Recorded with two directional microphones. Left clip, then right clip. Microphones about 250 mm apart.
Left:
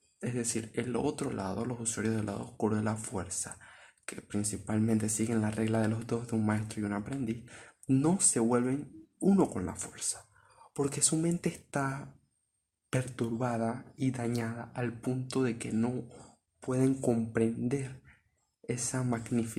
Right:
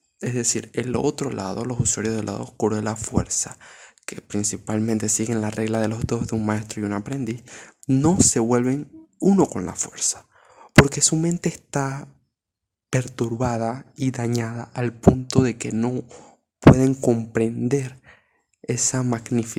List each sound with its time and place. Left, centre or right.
0.2 s speech: right